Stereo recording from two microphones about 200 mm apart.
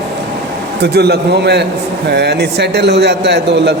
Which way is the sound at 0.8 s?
55° right (ahead or behind).